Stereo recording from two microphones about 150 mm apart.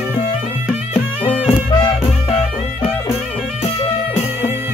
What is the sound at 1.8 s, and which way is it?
Music, 40° left (ahead or behind).